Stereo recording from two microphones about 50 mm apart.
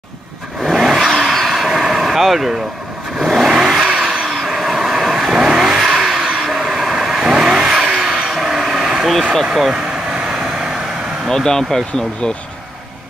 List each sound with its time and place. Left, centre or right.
0.7 s vehicle: centre
4.3 s vehicle: centre
11.2 s speech: centre